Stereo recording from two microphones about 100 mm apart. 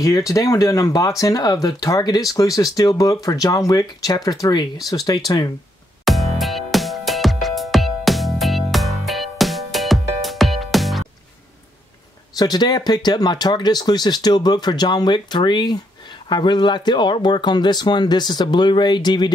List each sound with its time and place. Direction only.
0.0 s speech: 35° left (ahead or behind)
6.0 s music: centre (ahead or behind)
12.4 s speech: 40° left (ahead or behind)